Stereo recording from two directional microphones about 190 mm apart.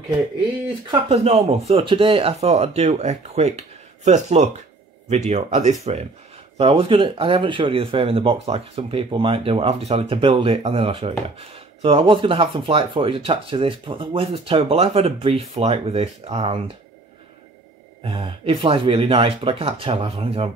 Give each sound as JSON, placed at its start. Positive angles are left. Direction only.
{"t": 0.8, "sound": "speech", "side_deg": -30}
{"t": 18.0, "sound": "speech", "side_deg": -30}